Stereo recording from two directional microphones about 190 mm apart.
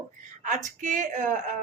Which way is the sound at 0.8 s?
40° right (ahead or behind).